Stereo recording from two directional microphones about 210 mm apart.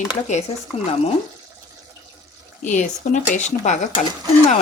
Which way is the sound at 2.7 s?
35° left (ahead or behind).